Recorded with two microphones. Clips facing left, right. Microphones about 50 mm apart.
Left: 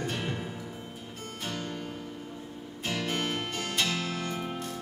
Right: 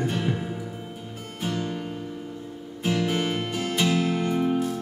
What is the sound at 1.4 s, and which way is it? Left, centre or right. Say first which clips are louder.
Music: right 7 dB; centre.